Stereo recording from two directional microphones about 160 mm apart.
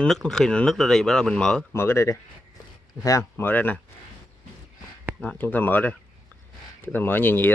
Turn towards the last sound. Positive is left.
turn(degrees=10)  # may be behind; listen again after turning